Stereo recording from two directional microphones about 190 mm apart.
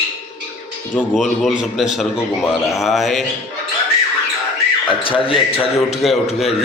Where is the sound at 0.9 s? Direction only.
5° left (ahead or behind).